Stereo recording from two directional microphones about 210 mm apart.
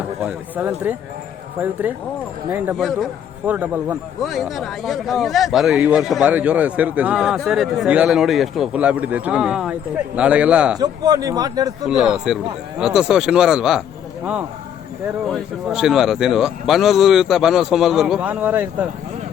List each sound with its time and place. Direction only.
0.2 s speech: 10° right (ahead or behind)
10.8 s speech: 20° right (ahead or behind)
11.9 s speech: 5° right (ahead or behind)
15.3 s speech: centre (ahead or behind)